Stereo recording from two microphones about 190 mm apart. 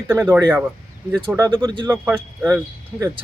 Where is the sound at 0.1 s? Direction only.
10° right (ahead or behind).